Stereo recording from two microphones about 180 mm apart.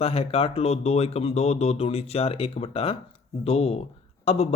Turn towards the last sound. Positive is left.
turn(degrees=35)  # may be behind; listen again after turning